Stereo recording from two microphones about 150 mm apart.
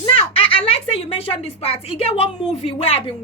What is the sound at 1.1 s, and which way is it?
A woman's voice, 40° left (ahead or behind).